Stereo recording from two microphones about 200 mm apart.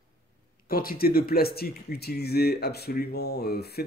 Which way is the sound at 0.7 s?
45° left (ahead or behind).